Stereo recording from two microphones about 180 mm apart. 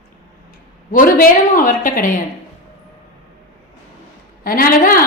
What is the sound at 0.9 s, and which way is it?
A woman's voice, 50° left (ahead or behind).